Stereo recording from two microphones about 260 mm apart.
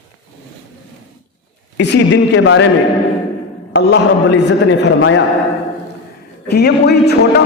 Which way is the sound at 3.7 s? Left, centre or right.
Left.